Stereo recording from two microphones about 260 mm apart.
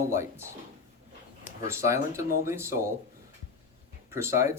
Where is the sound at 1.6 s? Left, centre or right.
Centre.